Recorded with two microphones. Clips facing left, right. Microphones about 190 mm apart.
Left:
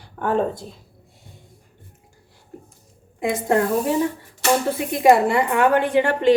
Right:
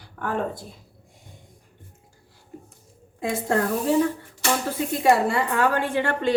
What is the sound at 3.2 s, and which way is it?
A woman's voice, 20° left (ahead or behind).